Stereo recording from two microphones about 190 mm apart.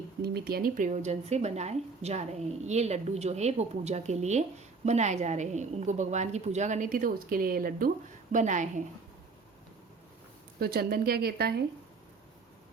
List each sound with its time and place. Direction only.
0.2 s a woman's voice: 55° right (ahead or behind)
10.6 s speech: 55° right (ahead or behind)